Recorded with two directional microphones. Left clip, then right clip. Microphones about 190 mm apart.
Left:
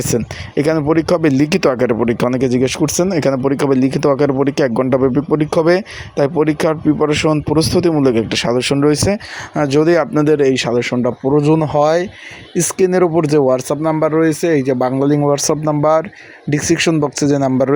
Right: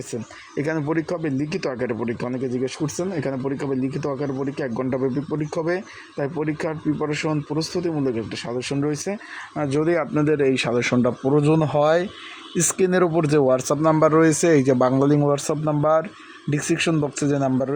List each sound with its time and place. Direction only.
0.5 s speech: 20° left (ahead or behind)